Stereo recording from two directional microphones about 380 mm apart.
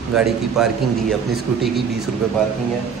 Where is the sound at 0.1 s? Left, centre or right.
Centre.